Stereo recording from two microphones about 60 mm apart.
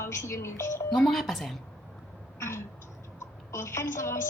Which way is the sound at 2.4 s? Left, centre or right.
Left.